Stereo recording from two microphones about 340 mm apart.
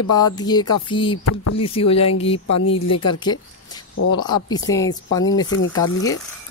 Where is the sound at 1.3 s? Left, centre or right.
Left.